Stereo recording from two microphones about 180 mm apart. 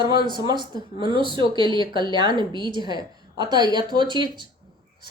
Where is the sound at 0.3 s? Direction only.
25° right (ahead or behind).